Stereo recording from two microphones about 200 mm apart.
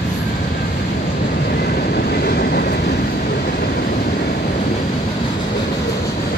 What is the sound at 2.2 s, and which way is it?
Vehicle, 50° left (ahead or behind).